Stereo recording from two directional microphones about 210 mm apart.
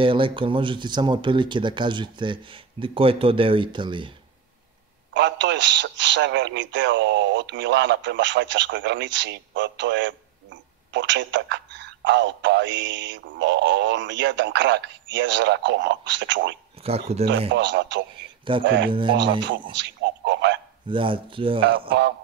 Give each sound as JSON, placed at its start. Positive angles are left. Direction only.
{"t": 0.0, "sound": "speech", "side_deg": -25}
{"t": 5.1, "sound": "a man's voice", "side_deg": -60}
{"t": 16.8, "sound": "speech", "side_deg": -30}
{"t": 17.5, "sound": "a man's voice", "side_deg": -60}
{"t": 18.9, "sound": "speech", "side_deg": -25}
{"t": 19.7, "sound": "speech", "side_deg": -60}
{"t": 20.9, "sound": "speech", "side_deg": -25}